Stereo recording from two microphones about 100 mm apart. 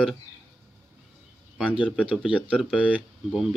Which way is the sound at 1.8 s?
10° right (ahead or behind).